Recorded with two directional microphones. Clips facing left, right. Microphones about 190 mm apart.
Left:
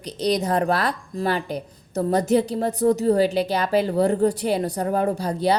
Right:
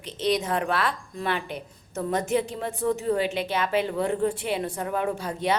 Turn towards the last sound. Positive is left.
turn(degrees=35)  # may be behind; listen again after turning